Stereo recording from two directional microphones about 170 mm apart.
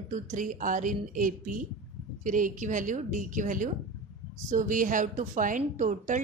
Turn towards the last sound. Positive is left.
turn(degrees=-50)  # may be behind; listen again after turning